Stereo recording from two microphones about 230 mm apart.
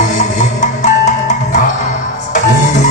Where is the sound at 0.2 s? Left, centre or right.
Left.